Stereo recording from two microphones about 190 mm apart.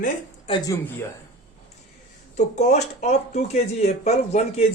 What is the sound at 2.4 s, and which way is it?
Speech, 40° left (ahead or behind).